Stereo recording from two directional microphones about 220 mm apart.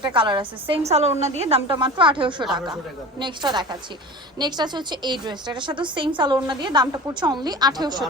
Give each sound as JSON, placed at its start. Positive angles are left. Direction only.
{"t": 0.1, "sound": "a woman's voice", "side_deg": -20}